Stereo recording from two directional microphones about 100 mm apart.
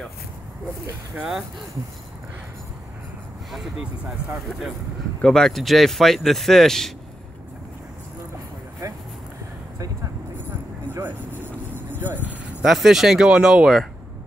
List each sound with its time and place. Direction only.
1.1 s speech: 10° right (ahead or behind)
3.5 s speech: 10° right (ahead or behind)
5.2 s speech: 5° left (ahead or behind)
8.8 s vehicle: 30° right (ahead or behind)
12.0 s speech: 20° right (ahead or behind)
12.6 s speech: centre (ahead or behind)